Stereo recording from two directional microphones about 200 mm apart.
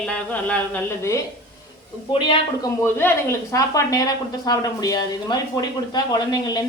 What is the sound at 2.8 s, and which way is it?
Speech, 10° left (ahead or behind).